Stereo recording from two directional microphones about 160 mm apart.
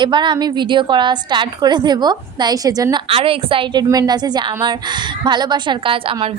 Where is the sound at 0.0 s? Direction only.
30° right (ahead or behind).